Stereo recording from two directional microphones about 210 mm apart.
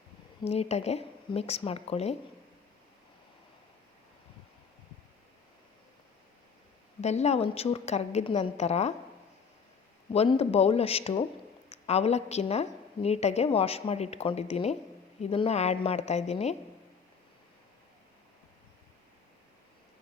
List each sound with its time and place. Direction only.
0.4 s speech: 30° left (ahead or behind)
7.0 s a woman's voice: 30° left (ahead or behind)
10.1 s a woman's voice: 30° left (ahead or behind)